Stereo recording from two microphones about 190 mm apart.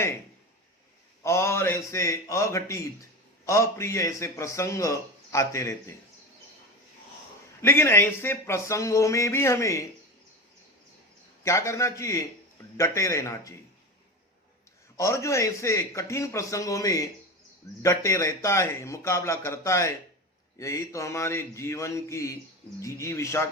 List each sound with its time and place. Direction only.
1.2 s a man's voice: 15° left (ahead or behind)
7.6 s a man's voice: 15° left (ahead or behind)
11.4 s a man's voice: 15° left (ahead or behind)
14.9 s a man's voice: 15° left (ahead or behind)